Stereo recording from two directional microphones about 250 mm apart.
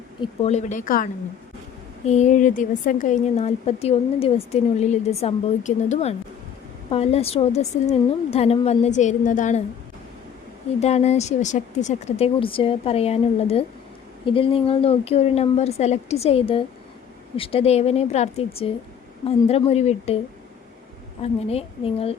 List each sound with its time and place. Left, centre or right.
0.2 s a woman's voice: left
10.8 s a woman's voice: left
21.2 s a woman's voice: left